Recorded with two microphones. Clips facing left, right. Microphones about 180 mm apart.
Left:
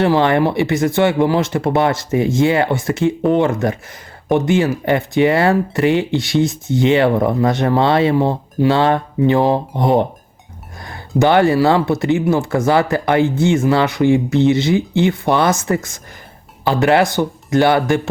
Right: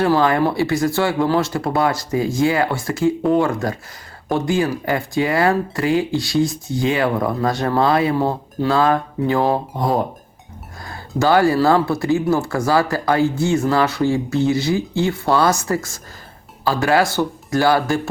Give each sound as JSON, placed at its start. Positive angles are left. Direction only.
{"t": 0.0, "sound": "speech", "side_deg": 25}